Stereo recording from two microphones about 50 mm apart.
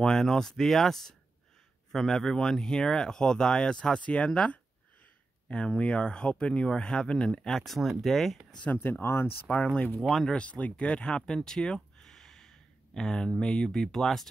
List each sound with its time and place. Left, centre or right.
0.0 s speech: centre
7.6 s speech: centre
9.0 s speech: left
9.9 s speech: centre
10.2 s speech: left